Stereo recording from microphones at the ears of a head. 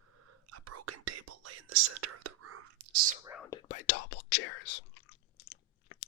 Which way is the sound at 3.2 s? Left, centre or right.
Left.